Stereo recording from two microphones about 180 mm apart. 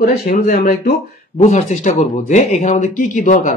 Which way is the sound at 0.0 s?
55° left (ahead or behind).